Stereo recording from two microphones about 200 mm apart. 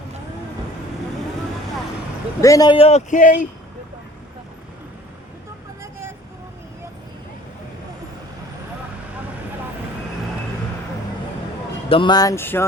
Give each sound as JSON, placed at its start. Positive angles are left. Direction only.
{"t": 2.4, "sound": "a man's voice", "side_deg": 15}
{"t": 5.8, "sound": "vehicle", "side_deg": -10}
{"t": 11.9, "sound": "speech", "side_deg": 25}